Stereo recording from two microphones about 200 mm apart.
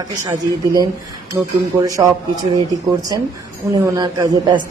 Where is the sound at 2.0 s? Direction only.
20° right (ahead or behind).